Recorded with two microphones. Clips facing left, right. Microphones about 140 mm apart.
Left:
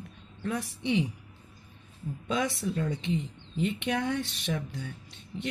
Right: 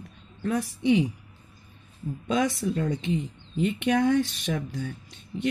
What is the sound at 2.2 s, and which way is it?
Speech, 45° right (ahead or behind).